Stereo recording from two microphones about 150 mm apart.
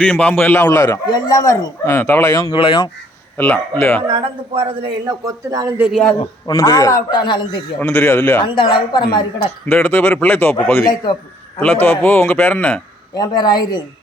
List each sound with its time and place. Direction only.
0.0 s a man's voice: 10° left (ahead or behind); by 2.9 s 35° left (ahead or behind)
3.3 s speech: 15° left (ahead or behind)
4.0 s a man's voice: 35° right (ahead or behind)
5.9 s a man's voice: 5° left (ahead or behind)
6.5 s a man's voice: 25° left (ahead or behind)
7.8 s speech: 10° left (ahead or behind)
8.5 s a woman's voice: 30° left (ahead or behind)
9.6 s speech: 10° left (ahead or behind)
13.1 s a man's voice: 30° left (ahead or behind)